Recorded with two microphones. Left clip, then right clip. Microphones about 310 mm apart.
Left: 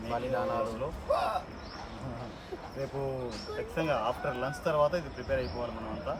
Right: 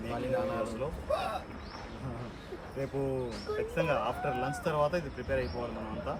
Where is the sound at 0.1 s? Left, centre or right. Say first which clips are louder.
Left 2 dB; centre.